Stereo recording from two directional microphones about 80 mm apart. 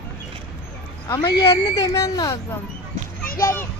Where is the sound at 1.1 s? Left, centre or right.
Left.